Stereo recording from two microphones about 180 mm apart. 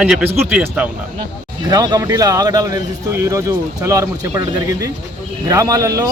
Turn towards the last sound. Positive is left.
turn(degrees=-20)  # may be behind; listen again after turning